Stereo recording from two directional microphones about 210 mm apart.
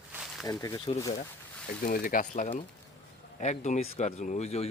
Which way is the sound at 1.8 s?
40° left (ahead or behind).